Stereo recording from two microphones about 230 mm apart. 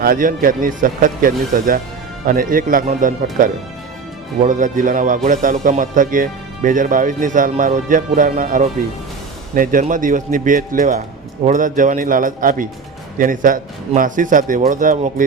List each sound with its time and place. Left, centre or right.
0.0 s speech: right